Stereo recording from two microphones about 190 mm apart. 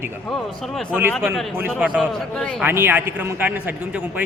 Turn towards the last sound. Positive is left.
turn(degrees=-10)  # may be behind; listen again after turning